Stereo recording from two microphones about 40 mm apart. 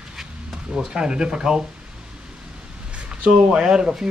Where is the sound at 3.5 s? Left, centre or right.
Centre.